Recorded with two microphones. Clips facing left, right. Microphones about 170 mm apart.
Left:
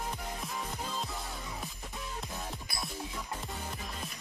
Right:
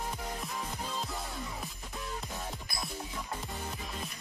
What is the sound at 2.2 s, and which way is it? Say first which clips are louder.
Music: even; centre (ahead or behind).